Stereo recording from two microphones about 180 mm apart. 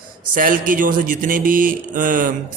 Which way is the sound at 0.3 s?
50° right (ahead or behind).